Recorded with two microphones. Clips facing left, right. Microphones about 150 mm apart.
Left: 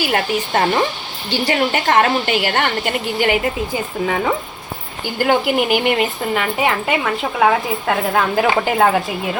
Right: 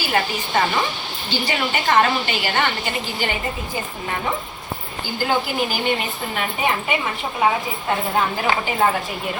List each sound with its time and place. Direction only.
0.0 s a woman's voice: 55° left (ahead or behind)
5.2 s a woman's voice: 65° left (ahead or behind)
6.3 s a woman's voice: 90° left
8.1 s speech: 80° left